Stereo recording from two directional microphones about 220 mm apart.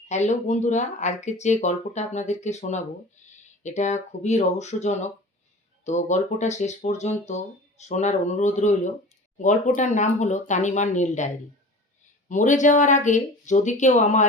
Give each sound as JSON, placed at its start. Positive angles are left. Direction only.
{"t": 0.1, "sound": "speech", "side_deg": 30}
{"t": 3.2, "sound": "a sound", "side_deg": 35}
{"t": 3.6, "sound": "speech", "side_deg": 30}
{"t": 12.3, "sound": "speech", "side_deg": 35}